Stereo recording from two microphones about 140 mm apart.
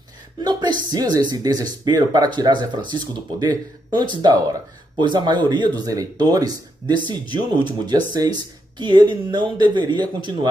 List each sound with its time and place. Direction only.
0.4 s speech: 30° right (ahead or behind)